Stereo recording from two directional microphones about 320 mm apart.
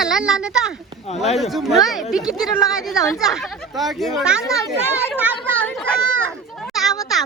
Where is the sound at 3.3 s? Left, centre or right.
Centre.